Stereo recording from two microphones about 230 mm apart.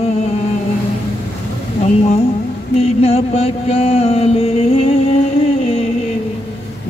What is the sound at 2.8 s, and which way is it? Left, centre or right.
Mantra, left.